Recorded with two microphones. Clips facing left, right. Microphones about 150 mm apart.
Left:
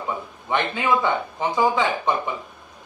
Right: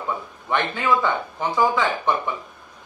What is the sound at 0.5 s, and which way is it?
Speech, 15° left (ahead or behind).